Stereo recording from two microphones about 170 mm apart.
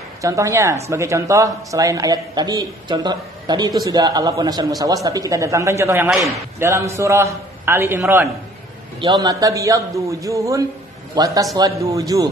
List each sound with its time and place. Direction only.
0.2 s speech: 20° right (ahead or behind)